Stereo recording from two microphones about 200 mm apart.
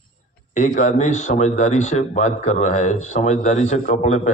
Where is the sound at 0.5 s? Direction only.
35° left (ahead or behind).